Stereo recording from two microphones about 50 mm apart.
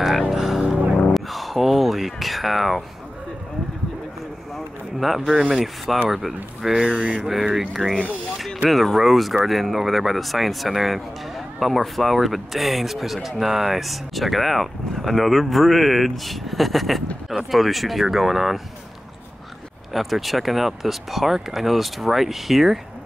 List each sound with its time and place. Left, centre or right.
0.3 s music: centre
1.1 s a sound: centre
4.9 s speech: centre
6.8 s a sound: centre
7.2 s speech: centre
19.9 s speech: centre